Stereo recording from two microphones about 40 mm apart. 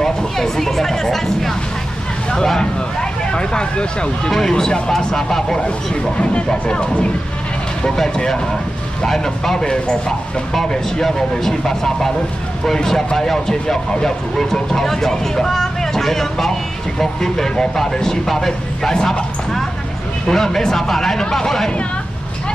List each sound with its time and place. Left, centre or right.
0.0 s a sound: centre
2.3 s speech: centre
6.1 s speech: left
7.8 s speech: centre
20.2 s speech: centre